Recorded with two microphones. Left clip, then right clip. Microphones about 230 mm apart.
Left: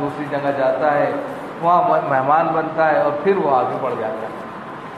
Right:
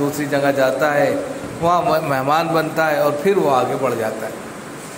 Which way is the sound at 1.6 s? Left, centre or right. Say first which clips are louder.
Left 1 dB; right.